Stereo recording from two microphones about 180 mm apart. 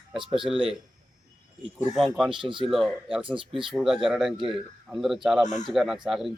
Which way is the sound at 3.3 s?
30° right (ahead or behind).